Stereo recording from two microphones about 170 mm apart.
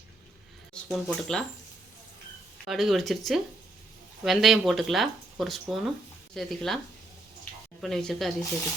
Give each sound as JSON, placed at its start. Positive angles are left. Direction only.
{"t": 0.7, "sound": "speech", "side_deg": 0}
{"t": 2.6, "sound": "speech", "side_deg": 0}
{"t": 7.8, "sound": "speech", "side_deg": 0}